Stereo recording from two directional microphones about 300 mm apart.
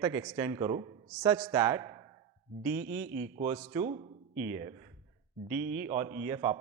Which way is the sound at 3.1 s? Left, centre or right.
Right.